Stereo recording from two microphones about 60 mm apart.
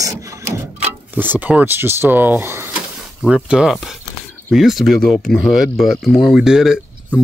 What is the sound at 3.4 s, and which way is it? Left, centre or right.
Speech, centre.